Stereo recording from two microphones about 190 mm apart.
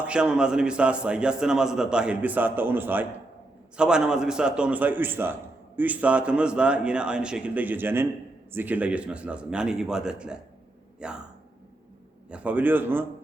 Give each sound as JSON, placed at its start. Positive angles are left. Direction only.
{"t": 0.0, "sound": "a man's voice", "side_deg": -5}
{"t": 12.3, "sound": "a man's voice", "side_deg": -5}